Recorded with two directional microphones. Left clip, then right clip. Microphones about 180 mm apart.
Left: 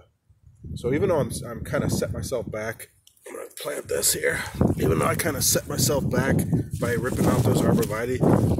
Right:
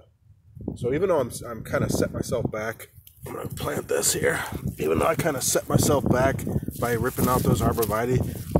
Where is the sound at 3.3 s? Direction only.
25° right (ahead or behind).